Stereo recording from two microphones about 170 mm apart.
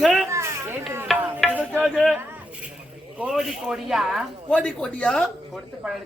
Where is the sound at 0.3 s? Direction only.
15° right (ahead or behind).